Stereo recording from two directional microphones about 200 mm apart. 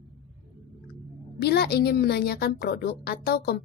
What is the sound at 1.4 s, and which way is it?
A woman's voice, 55° left (ahead or behind).